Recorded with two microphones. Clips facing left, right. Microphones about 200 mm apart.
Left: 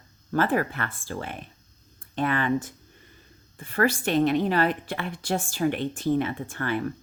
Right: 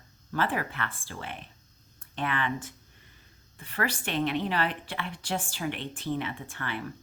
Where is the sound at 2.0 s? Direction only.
40° left (ahead or behind).